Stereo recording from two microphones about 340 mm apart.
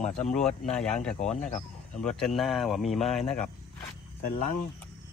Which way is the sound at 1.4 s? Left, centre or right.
Left.